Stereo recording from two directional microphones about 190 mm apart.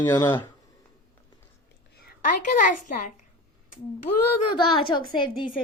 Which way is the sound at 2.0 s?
40° left (ahead or behind).